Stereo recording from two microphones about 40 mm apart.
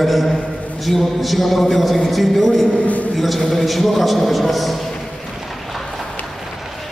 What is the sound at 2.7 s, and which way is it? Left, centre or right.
Speech, left.